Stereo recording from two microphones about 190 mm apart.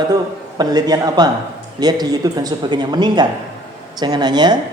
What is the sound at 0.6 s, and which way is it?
Speech, 20° right (ahead or behind).